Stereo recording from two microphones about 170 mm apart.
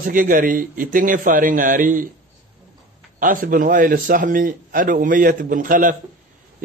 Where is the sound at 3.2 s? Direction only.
55° right (ahead or behind).